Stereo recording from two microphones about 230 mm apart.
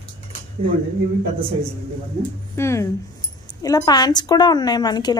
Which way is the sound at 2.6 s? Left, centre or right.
Centre.